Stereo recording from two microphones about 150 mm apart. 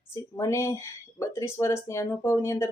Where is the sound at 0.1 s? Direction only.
20° left (ahead or behind).